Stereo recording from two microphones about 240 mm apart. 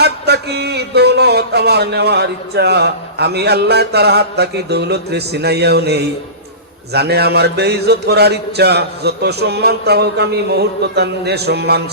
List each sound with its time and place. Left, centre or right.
0.0 s a man's voice: right